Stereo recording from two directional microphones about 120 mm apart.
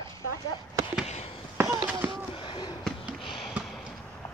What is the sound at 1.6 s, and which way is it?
Run, 20° right (ahead or behind).